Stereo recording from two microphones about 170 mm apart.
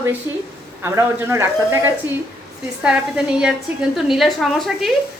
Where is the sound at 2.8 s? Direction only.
5° right (ahead or behind).